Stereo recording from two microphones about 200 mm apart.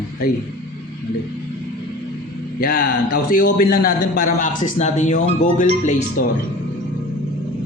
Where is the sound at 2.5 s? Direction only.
50° left (ahead or behind).